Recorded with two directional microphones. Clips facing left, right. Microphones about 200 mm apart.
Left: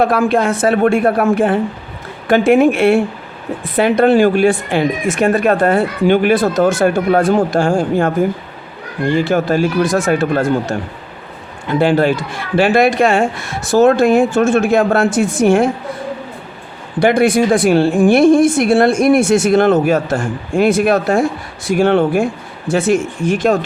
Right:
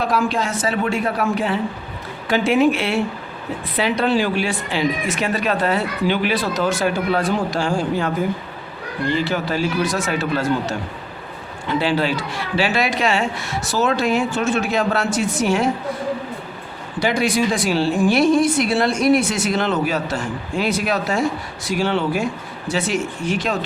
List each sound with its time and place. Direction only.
0.0 s a woman's voice: 55° left (ahead or behind)
17.0 s a woman's voice: 55° left (ahead or behind)